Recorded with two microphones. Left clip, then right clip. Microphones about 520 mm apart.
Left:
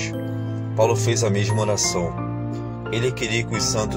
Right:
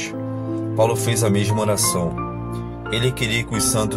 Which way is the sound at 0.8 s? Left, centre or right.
Right.